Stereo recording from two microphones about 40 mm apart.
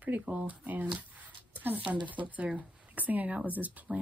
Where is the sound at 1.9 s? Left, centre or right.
Right.